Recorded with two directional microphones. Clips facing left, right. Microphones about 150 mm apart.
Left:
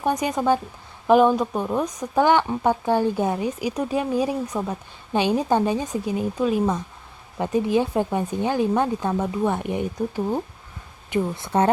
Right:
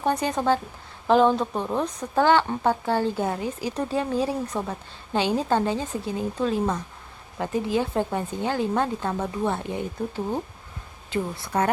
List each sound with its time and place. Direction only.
0.0 s speech: 10° left (ahead or behind)